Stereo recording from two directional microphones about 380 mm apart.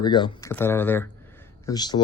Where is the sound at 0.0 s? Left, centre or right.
Centre.